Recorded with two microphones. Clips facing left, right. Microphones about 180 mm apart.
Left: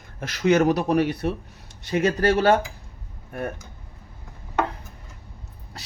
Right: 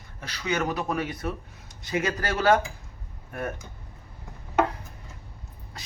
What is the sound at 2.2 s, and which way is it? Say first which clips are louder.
Speech: left 3 dB; 30° left (ahead or behind).